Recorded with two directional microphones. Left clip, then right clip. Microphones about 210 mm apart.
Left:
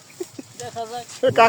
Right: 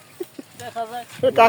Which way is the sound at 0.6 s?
10° right (ahead or behind).